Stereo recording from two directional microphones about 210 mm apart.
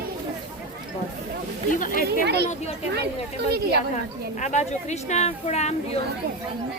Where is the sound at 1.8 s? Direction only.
40° left (ahead or behind).